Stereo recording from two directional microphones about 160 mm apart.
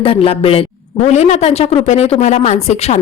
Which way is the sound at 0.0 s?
35° left (ahead or behind).